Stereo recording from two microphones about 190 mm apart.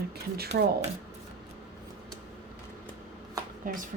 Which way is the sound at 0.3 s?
60° right (ahead or behind).